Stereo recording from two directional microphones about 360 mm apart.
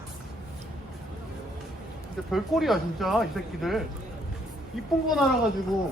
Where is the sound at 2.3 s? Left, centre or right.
Centre.